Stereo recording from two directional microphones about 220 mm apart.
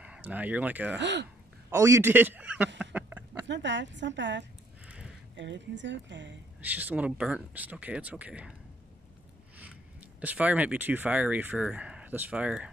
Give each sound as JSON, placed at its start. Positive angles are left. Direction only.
{"t": 0.0, "sound": "speech", "side_deg": -5}
{"t": 0.9, "sound": "a woman's voice", "side_deg": -50}
{"t": 1.7, "sound": "speech", "side_deg": -15}
{"t": 2.8, "sound": "a sound", "side_deg": -5}
{"t": 3.4, "sound": "a woman's voice", "side_deg": -55}
{"t": 4.8, "sound": "a sound", "side_deg": -5}
{"t": 5.3, "sound": "a woman's voice", "side_deg": -55}
{"t": 6.6, "sound": "speech", "side_deg": -5}
{"t": 10.2, "sound": "speech", "side_deg": -5}